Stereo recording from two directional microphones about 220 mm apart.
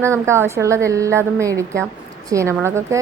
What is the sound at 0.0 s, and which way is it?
A woman's voice, 10° right (ahead or behind).